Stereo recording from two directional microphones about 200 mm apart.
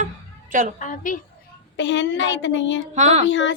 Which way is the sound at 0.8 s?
40° left (ahead or behind).